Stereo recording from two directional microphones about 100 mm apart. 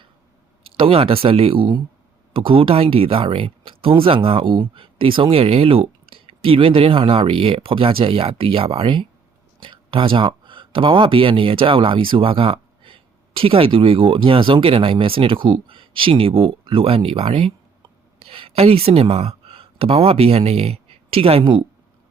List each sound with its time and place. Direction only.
0.8 s speech: 65° right (ahead or behind)